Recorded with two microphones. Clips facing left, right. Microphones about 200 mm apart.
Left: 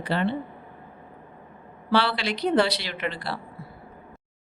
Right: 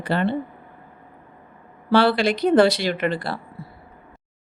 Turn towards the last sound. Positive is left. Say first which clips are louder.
# right 7 dB
turn(degrees=-50)  # may be behind; listen again after turning